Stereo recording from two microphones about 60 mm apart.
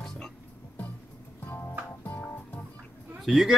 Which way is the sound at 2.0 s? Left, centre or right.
Left.